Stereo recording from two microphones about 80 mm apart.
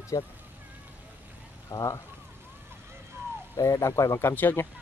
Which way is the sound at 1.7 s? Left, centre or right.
Left.